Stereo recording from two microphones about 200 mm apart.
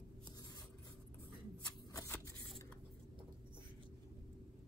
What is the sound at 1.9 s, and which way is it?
Shuffling cards, 15° left (ahead or behind).